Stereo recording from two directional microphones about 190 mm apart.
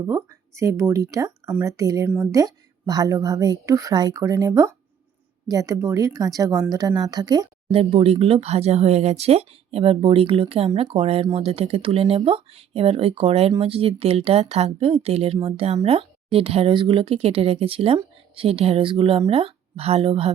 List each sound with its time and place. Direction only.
0.0 s speech: 15° right (ahead or behind)